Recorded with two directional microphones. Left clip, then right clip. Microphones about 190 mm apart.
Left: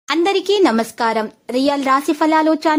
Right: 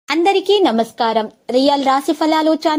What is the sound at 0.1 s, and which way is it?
A woman's voice, centre (ahead or behind).